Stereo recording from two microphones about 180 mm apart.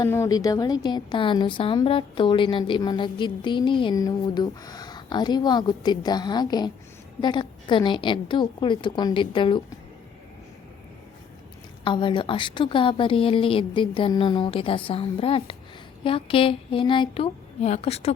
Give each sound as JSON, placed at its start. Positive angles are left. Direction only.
{"t": 0.0, "sound": "a woman's voice", "side_deg": 15}
{"t": 11.9, "sound": "a woman's voice", "side_deg": 25}